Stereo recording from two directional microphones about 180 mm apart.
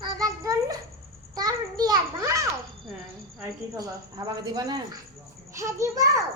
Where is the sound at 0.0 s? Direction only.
20° right (ahead or behind).